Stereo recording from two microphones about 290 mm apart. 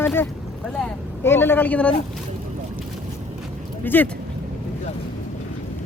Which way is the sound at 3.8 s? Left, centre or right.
Centre.